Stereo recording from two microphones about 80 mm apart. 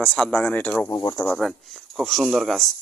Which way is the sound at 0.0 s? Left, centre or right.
Centre.